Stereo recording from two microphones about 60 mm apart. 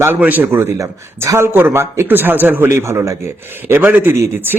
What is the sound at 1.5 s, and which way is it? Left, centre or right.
Speech, right.